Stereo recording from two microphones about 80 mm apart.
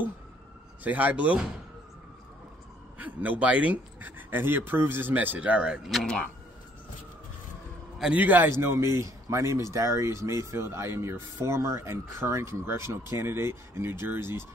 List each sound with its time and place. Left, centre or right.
0.8 s speech: right
3.0 s speech: centre
8.1 s speech: right
8.5 s speech: right